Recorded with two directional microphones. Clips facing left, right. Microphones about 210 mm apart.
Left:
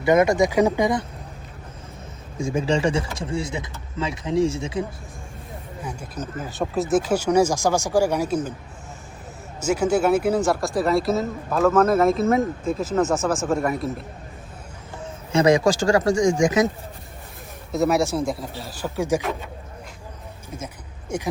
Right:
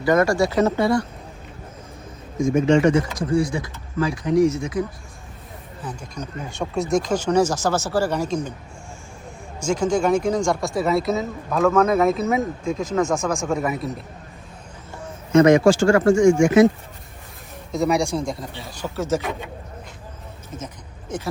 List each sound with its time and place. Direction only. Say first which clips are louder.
0.0 s speech: left 1 dB; 20° left (ahead or behind)
2.4 s speech: right 5 dB; 30° left (ahead or behind)
5.8 s speech: even; 10° left (ahead or behind)
9.6 s speech: even; 5° left (ahead or behind)
15.4 s speech: right 4 dB; 35° left (ahead or behind)
17.7 s speech: even; 5° left (ahead or behind)
21.1 s speech: left 2 dB; 10° left (ahead or behind)